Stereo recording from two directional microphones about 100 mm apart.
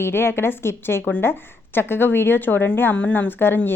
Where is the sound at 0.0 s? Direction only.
25° left (ahead or behind).